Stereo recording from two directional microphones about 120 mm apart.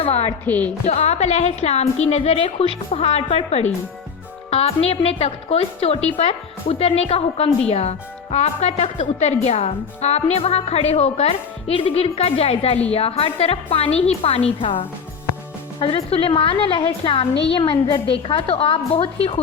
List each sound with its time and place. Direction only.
0.0 s a woman's voice: 60° left (ahead or behind)
0.4 s speech: 15° left (ahead or behind)
0.9 s a woman's voice: 65° left (ahead or behind); by 18.0 s 40° left (ahead or behind)
18.1 s a woman's voice: 50° left (ahead or behind)